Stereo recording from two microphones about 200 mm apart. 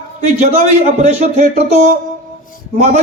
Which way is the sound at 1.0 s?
35° right (ahead or behind).